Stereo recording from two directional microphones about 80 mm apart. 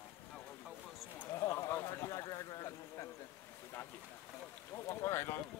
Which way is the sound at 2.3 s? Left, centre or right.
Left.